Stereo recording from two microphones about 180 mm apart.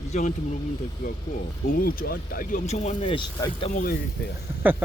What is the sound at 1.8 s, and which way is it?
Speech, 55° left (ahead or behind).